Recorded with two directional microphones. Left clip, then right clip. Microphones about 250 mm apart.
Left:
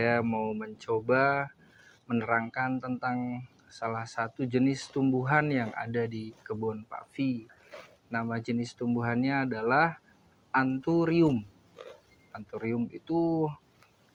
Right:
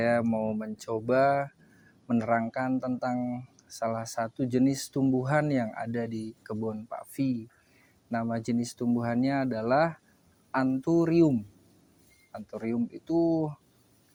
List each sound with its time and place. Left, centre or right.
0.0 s speech: right
13.1 s speech: right